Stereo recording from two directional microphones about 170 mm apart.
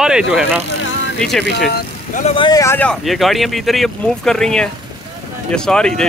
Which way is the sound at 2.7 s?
5° left (ahead or behind).